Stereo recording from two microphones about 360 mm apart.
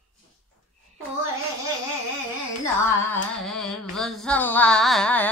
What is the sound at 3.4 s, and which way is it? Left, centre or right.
Carnatic music, centre.